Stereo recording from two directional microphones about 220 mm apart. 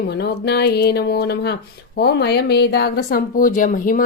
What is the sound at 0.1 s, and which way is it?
Speech, 50° left (ahead or behind).